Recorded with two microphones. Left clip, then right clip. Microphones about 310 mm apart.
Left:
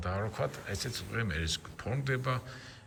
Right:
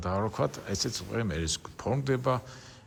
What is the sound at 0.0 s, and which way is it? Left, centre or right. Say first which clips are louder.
Speech: right 5 dB; centre.